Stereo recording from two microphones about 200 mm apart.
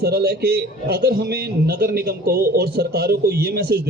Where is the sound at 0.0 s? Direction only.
50° right (ahead or behind).